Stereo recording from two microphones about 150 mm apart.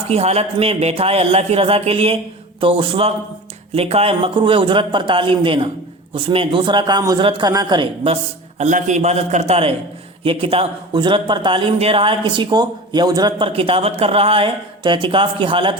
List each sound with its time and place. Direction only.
0.1 s a man's voice: 45° right (ahead or behind); by 13.5 s 25° right (ahead or behind)
13.5 s a man's voice: 40° right (ahead or behind)